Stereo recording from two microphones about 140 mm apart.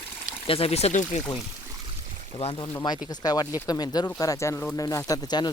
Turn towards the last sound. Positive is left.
turn(degrees=30)  # may be behind; listen again after turning